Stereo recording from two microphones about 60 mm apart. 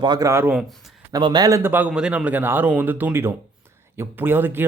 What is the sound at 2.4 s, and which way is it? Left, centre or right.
Speech, right.